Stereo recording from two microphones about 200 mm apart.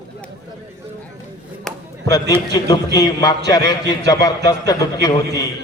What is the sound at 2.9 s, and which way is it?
A man's voice, 20° left (ahead or behind).